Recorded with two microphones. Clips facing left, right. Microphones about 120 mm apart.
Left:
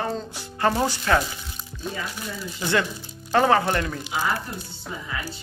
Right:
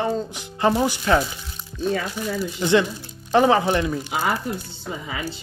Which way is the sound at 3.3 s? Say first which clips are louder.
Right 2 dB; 20° right (ahead or behind).